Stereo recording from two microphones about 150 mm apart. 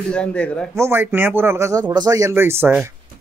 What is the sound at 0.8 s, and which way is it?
Speech, 15° right (ahead or behind).